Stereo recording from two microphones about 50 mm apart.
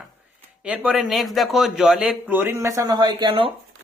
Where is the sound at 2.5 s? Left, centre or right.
Right.